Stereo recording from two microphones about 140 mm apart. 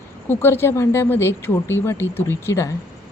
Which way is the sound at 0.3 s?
15° left (ahead or behind).